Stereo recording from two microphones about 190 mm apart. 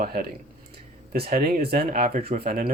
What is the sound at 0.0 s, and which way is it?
Speech, 55° right (ahead or behind).